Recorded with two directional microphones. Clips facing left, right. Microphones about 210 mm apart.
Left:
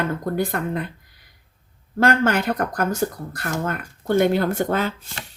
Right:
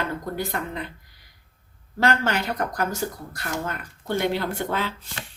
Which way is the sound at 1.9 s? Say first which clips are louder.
Left 4 dB; 50° left (ahead or behind).